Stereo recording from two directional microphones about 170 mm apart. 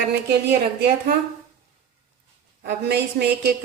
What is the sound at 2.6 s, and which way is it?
Speech, 75° right (ahead or behind).